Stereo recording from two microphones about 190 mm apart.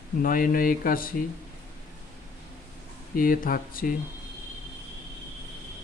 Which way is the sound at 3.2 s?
50° left (ahead or behind).